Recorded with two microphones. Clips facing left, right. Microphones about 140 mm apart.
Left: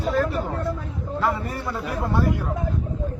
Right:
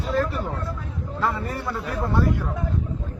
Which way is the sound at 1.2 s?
5° left (ahead or behind).